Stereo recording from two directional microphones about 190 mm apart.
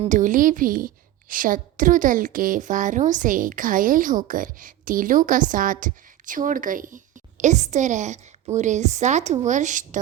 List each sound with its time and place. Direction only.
0.0 s a woman's voice: 40° right (ahead or behind)